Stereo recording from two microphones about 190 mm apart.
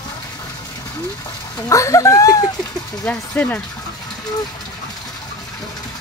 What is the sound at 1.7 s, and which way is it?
Speech, 15° left (ahead or behind).